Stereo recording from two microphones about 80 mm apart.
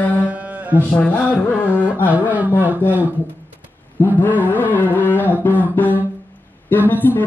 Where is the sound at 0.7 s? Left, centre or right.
Left.